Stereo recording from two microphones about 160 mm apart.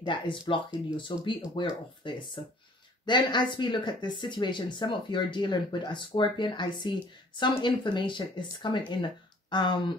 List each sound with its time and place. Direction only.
0.0 s speech: 30° left (ahead or behind)